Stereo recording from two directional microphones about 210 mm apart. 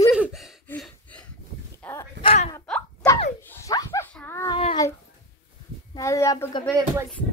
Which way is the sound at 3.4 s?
10° left (ahead or behind).